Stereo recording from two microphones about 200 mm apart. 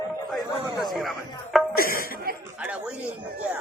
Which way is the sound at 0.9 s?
Centre (ahead or behind).